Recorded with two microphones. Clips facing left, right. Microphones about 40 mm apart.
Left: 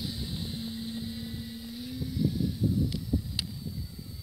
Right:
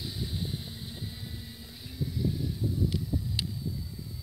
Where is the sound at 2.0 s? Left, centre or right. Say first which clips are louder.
Left 2 dB; centre.